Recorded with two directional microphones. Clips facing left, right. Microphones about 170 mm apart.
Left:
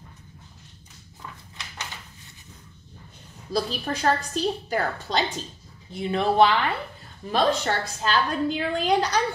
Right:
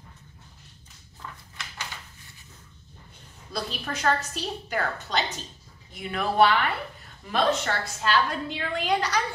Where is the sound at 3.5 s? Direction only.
35° left (ahead or behind).